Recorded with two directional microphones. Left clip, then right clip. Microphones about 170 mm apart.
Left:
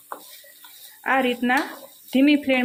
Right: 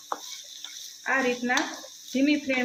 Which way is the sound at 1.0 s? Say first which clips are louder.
Left 4 dB; 50° left (ahead or behind).